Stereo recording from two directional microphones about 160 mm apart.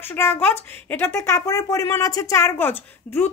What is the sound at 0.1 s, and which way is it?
A woman's voice, 15° left (ahead or behind).